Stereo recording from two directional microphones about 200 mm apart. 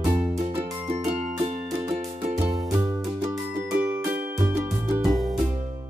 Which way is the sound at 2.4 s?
Centre (ahead or behind).